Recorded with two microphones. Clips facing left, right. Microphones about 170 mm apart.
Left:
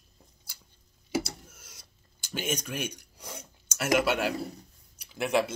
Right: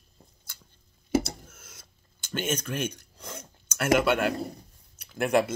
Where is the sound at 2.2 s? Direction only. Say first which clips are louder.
Right 3 dB; 10° left (ahead or behind).